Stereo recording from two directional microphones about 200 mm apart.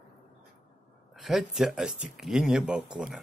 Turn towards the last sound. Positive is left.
turn(degrees=-5)  # may be behind; listen again after turning